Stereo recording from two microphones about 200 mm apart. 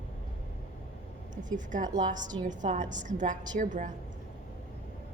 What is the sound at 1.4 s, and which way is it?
A woman's voice, 40° right (ahead or behind).